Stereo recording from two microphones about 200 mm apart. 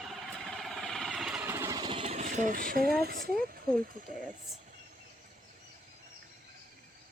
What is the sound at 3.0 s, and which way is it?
Speech, 50° right (ahead or behind).